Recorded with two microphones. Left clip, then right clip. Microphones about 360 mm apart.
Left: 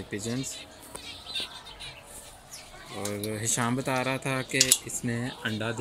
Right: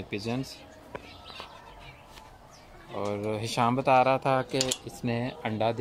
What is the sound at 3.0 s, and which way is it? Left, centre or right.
Speech, centre.